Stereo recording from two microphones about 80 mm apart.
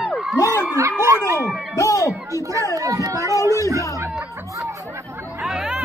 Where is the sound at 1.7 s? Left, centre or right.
Left.